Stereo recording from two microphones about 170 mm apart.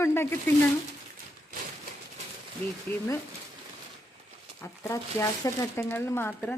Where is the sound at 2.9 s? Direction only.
35° right (ahead or behind).